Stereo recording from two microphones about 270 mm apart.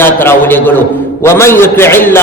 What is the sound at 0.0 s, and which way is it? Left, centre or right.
A man's voice, centre.